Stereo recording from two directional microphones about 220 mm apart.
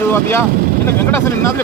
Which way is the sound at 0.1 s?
10° left (ahead or behind).